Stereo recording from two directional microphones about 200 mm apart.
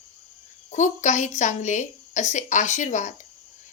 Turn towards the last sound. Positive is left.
turn(degrees=40)  # may be behind; listen again after turning